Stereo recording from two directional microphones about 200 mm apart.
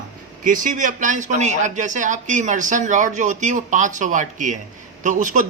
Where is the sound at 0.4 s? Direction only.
40° right (ahead or behind).